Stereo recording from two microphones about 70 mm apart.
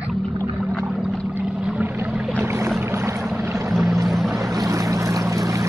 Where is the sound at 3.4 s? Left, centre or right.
Right.